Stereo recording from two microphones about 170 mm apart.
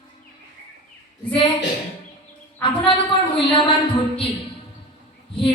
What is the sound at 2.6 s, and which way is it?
Speech, 30° left (ahead or behind).